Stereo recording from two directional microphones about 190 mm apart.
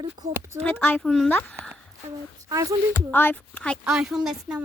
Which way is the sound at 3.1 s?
10° left (ahead or behind).